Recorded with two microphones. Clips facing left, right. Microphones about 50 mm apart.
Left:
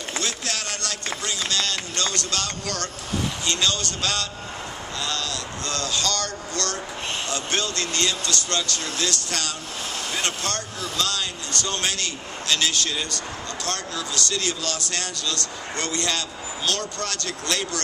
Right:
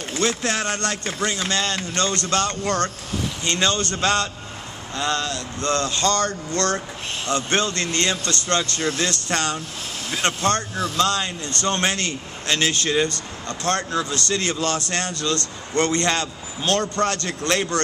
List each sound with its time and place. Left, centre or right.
0.2 s speech: right